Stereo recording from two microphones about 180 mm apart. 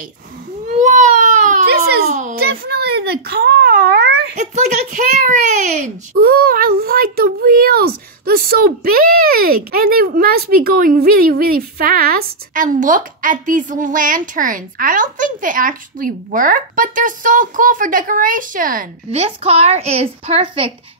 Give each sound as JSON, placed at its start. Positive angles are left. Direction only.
{"t": 0.7, "sound": "baby cry", "side_deg": -40}
{"t": 1.7, "sound": "baby cry", "side_deg": -60}
{"t": 2.0, "sound": "a sound", "side_deg": -40}
{"t": 2.3, "sound": "a sound", "side_deg": -60}
{"t": 4.4, "sound": "a child's voice", "side_deg": -45}
{"t": 19.0, "sound": "a woman's voice", "side_deg": -35}